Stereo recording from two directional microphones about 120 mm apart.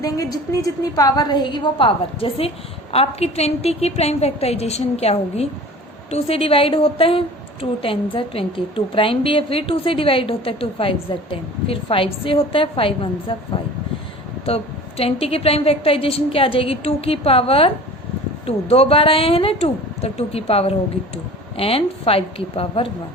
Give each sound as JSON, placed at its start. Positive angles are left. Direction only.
{"t": 0.0, "sound": "a woman's voice", "side_deg": 30}
{"t": 14.4, "sound": "a woman's voice", "side_deg": 55}